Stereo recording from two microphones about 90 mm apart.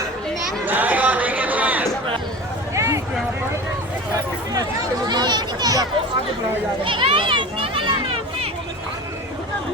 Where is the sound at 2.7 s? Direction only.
35° right (ahead or behind).